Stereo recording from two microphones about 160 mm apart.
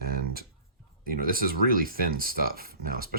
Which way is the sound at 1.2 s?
65° right (ahead or behind).